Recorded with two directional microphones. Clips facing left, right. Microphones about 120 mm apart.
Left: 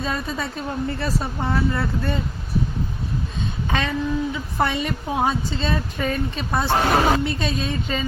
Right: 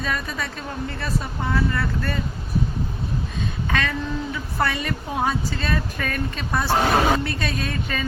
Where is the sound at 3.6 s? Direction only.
25° left (ahead or behind).